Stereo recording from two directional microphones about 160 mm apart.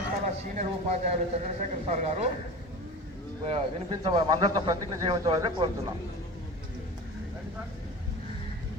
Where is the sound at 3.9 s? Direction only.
25° right (ahead or behind).